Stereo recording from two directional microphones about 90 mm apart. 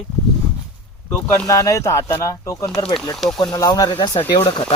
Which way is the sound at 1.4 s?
35° left (ahead or behind).